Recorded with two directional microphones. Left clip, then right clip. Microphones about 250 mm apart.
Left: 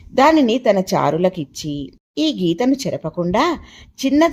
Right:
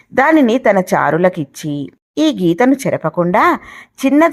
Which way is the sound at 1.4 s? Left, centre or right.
Right.